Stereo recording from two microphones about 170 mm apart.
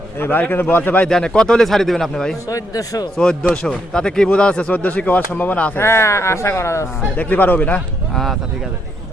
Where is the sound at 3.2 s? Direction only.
5° left (ahead or behind).